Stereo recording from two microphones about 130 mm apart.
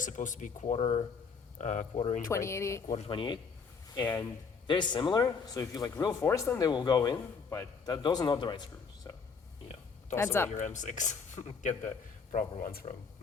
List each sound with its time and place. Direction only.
0.0 s speech: 80° left; by 1.0 s 55° left (ahead or behind)
1.5 s speech: 70° left (ahead or behind)
2.0 s speech: 60° left (ahead or behind)
2.2 s speech: 20° left (ahead or behind)
3.1 s speech: 35° left (ahead or behind)
4.6 s speech: 35° left (ahead or behind); by 10.5 s 20° left (ahead or behind)
10.5 s speech: 70° left (ahead or behind)
12.3 s speech: 80° left